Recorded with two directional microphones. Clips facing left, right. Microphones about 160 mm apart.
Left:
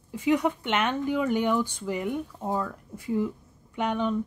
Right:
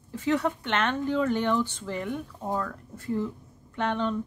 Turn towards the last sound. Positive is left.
turn(degrees=10)  # may be behind; listen again after turning